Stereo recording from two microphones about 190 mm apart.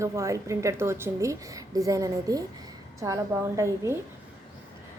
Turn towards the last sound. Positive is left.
turn(degrees=-15)  # may be behind; listen again after turning